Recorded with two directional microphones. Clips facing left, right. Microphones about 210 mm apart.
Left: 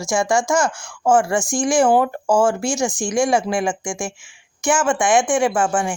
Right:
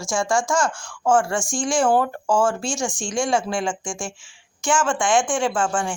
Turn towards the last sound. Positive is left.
turn(degrees=20)  # may be behind; listen again after turning